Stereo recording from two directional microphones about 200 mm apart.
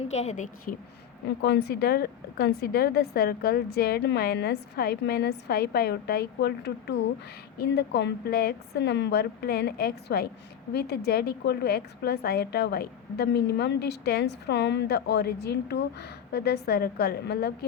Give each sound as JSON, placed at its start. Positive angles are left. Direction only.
{"t": 0.1, "sound": "a woman's voice", "side_deg": 35}
{"t": 1.4, "sound": "a woman's voice", "side_deg": 55}